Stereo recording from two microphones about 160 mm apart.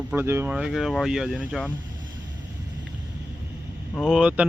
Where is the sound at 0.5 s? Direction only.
Centre (ahead or behind).